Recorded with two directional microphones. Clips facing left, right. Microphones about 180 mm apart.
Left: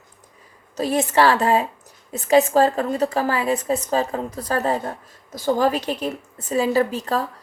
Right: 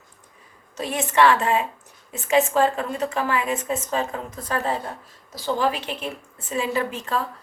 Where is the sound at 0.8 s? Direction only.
35° left (ahead or behind).